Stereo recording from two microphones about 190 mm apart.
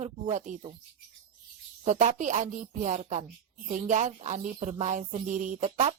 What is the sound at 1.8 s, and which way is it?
Speech, 40° right (ahead or behind).